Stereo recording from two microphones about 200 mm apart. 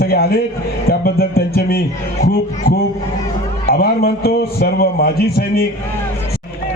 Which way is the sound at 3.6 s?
50° left (ahead or behind).